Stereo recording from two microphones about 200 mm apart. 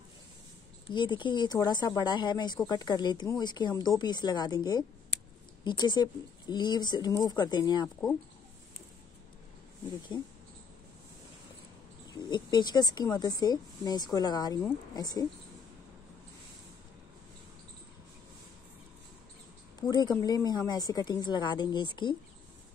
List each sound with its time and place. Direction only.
0.8 s speech: 25° left (ahead or behind)
10.1 s speech: 20° left (ahead or behind)
12.1 s speech: 20° left (ahead or behind)
19.9 s speech: 20° left (ahead or behind)